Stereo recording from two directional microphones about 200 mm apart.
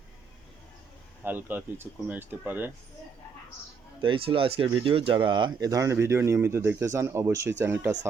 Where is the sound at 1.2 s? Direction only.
10° right (ahead or behind).